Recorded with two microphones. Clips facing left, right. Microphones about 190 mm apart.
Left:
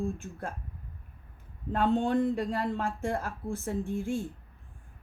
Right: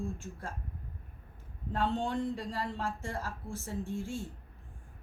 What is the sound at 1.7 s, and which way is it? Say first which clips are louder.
A woman's voice: left 6 dB; 55° left (ahead or behind).